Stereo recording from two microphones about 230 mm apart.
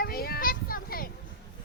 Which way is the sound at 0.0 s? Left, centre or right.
Left.